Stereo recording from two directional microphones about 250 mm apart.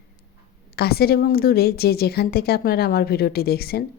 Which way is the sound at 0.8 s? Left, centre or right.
Left.